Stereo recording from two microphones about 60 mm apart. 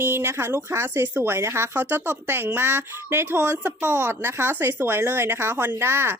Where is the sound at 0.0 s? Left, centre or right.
Right.